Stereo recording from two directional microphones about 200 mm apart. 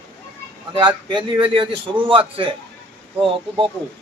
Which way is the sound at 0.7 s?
25° right (ahead or behind).